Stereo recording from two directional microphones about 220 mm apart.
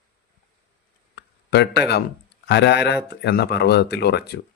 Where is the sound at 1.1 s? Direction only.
50° left (ahead or behind).